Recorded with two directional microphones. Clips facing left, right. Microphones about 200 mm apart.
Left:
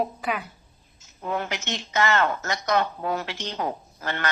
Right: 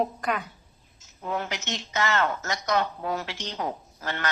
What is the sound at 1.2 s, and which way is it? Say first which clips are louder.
Speech: left 2 dB; 60° left (ahead or behind).